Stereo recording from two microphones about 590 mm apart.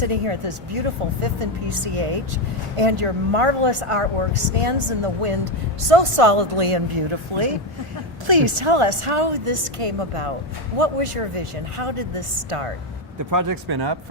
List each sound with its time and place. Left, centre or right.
0.0 s speech: right
13.3 s speech: right